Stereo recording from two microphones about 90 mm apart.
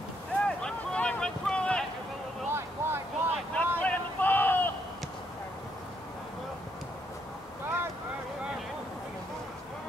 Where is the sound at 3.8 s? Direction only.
20° left (ahead or behind).